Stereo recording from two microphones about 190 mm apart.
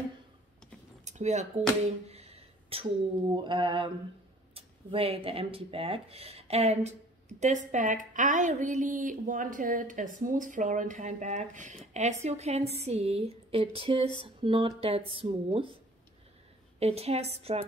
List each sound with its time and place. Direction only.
1.0 s a sound: 35° right (ahead or behind)
3.3 s speech: 25° right (ahead or behind)
16.8 s speech: 35° right (ahead or behind)